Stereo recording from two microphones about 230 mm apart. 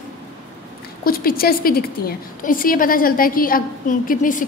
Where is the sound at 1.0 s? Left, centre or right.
Left.